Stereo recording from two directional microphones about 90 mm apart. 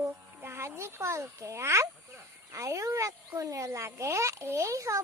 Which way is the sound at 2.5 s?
35° right (ahead or behind).